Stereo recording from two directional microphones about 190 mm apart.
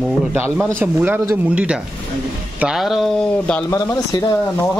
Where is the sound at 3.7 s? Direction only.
20° left (ahead or behind).